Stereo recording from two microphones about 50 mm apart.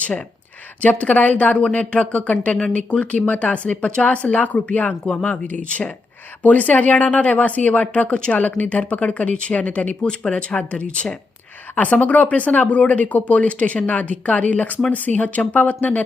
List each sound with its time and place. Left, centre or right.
0.8 s speech: left